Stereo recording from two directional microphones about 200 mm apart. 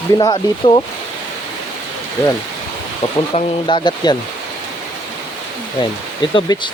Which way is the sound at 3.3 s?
25° left (ahead or behind).